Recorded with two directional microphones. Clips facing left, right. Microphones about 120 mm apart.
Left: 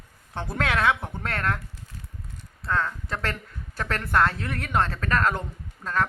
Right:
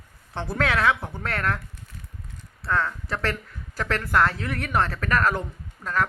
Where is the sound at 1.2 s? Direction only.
25° left (ahead or behind).